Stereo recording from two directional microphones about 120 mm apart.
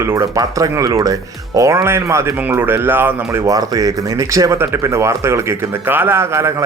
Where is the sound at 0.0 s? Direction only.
20° right (ahead or behind).